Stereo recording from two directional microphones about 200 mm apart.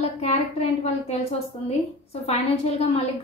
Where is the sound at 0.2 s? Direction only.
35° left (ahead or behind).